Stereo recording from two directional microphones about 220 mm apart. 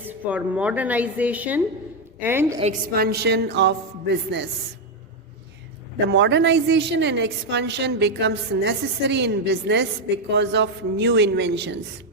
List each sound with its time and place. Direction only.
0.0 s a woman's voice: 5° right (ahead or behind)
2.9 s a woman's voice: 45° right (ahead or behind)
6.1 s a woman's voice: 55° right (ahead or behind)